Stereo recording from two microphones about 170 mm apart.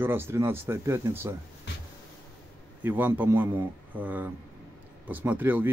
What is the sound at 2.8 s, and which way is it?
A man's voice, 10° right (ahead or behind).